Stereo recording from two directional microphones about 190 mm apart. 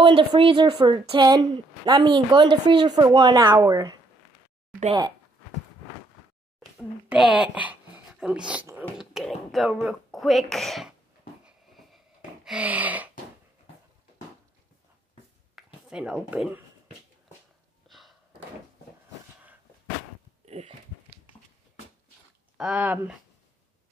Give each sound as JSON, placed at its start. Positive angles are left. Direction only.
{"t": 0.0, "sound": "a woman's voice", "side_deg": -25}
{"t": 7.1, "sound": "speech", "side_deg": -5}
{"t": 11.4, "sound": "a sound", "side_deg": 0}
{"t": 15.5, "sound": "speech", "side_deg": -5}
{"t": 17.8, "sound": "gasp", "side_deg": 0}
{"t": 20.4, "sound": "a sound", "side_deg": -35}
{"t": 22.6, "sound": "speech", "side_deg": -5}